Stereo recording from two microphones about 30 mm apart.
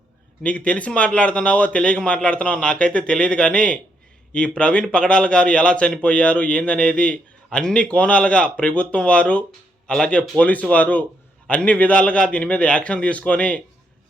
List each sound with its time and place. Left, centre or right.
0.4 s a man's voice: left
10.4 s a man's voice: left
11.9 s a man's voice: left
12.5 s a man's voice: left